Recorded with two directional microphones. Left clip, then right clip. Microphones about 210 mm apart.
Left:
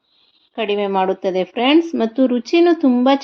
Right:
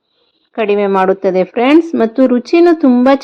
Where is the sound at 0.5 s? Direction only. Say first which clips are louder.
Right 6 dB; 20° right (ahead or behind).